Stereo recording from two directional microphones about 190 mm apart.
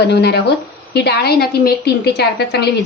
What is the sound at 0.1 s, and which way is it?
A woman's voice, 60° left (ahead or behind).